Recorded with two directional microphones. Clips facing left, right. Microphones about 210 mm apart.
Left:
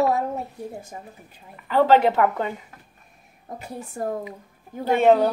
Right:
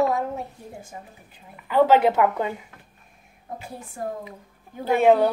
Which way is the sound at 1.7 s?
10° right (ahead or behind).